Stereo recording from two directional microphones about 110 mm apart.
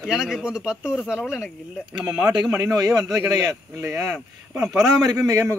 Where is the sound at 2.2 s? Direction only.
35° right (ahead or behind).